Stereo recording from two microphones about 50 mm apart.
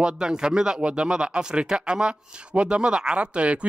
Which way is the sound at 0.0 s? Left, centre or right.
Centre.